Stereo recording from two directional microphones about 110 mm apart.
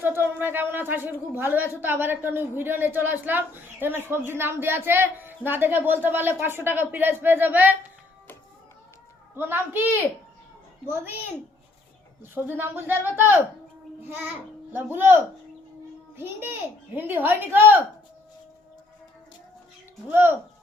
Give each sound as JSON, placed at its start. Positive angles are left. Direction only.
{"t": 0.0, "sound": "a woman's voice", "side_deg": -20}
{"t": 9.3, "sound": "a woman's voice", "side_deg": -20}
{"t": 10.8, "sound": "a woman's voice", "side_deg": -20}
{"t": 12.5, "sound": "a woman's voice", "side_deg": -20}
{"t": 14.7, "sound": "a woman's voice", "side_deg": -20}
{"t": 20.1, "sound": "a woman's voice", "side_deg": -20}